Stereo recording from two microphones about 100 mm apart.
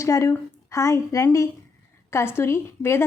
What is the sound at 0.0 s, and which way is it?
A woman's voice, 30° left (ahead or behind).